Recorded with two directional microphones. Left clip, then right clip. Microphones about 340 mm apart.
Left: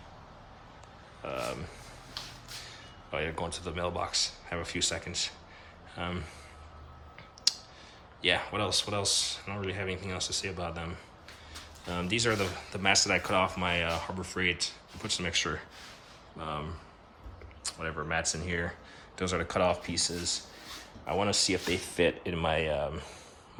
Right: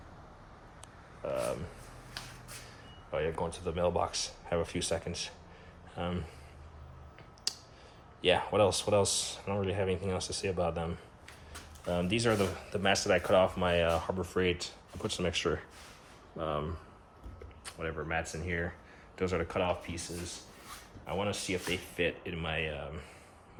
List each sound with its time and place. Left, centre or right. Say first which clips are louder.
1.2 s a sound: right 2 dB; centre
3.1 s speech: even; centre
7.5 s a sound: left 8 dB; centre
8.2 s speech: right 2 dB; centre
19.9 s speech: left 9 dB; left
21.1 s speech: left 6 dB; centre